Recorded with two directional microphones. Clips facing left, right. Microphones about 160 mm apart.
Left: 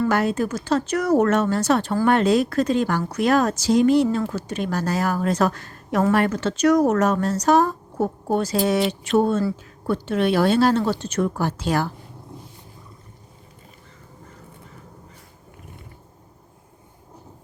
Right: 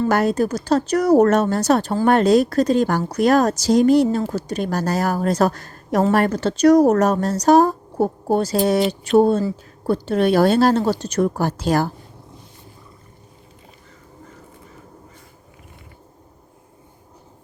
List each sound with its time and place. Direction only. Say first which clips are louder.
0.1 s speech: right 3 dB; 40° right (ahead or behind)